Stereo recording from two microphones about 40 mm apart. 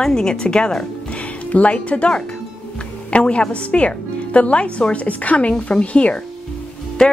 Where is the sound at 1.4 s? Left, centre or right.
Left.